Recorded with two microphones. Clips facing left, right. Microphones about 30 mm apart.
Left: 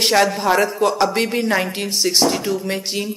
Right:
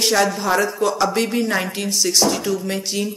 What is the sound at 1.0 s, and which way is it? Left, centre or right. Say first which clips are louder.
Speech: left 1 dB; left.